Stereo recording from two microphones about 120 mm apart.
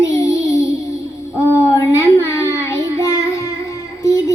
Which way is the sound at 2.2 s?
25° left (ahead or behind).